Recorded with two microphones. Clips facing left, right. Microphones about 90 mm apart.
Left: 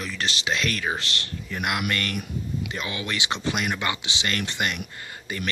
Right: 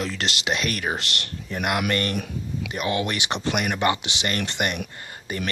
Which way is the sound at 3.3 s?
25° right (ahead or behind).